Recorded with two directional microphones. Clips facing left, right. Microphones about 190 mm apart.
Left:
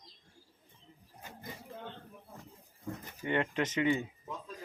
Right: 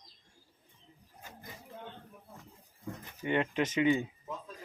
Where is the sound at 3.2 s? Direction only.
20° right (ahead or behind).